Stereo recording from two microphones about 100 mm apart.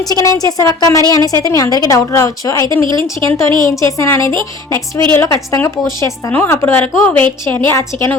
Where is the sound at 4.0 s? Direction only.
30° left (ahead or behind).